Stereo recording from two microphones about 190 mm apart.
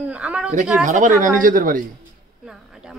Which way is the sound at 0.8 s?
40° right (ahead or behind).